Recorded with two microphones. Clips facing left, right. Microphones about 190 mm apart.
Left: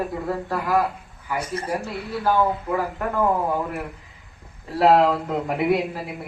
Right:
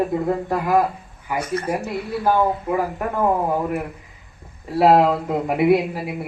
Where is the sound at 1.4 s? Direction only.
30° left (ahead or behind).